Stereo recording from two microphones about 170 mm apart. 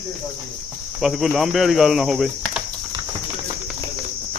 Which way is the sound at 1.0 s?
Centre (ahead or behind).